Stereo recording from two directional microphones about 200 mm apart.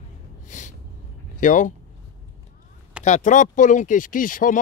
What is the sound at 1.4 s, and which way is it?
Speech, 40° left (ahead or behind).